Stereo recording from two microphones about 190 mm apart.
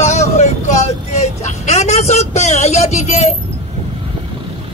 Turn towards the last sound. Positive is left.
turn(degrees=35)  # may be behind; listen again after turning